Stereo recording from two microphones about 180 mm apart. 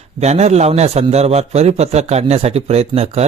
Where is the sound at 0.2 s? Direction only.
35° right (ahead or behind).